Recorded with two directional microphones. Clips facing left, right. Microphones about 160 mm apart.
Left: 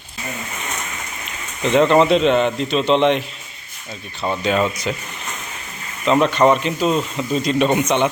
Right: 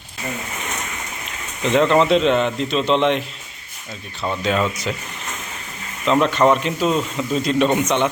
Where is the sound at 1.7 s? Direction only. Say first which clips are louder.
Left 2 dB; centre (ahead or behind).